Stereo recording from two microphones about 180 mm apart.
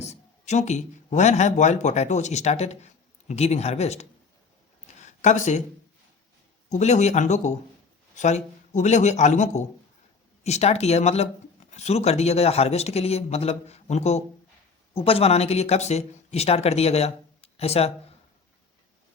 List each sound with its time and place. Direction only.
0.0 s speech: 40° left (ahead or behind)
4.9 s a sound: 40° left (ahead or behind)
6.7 s speech: 40° left (ahead or behind)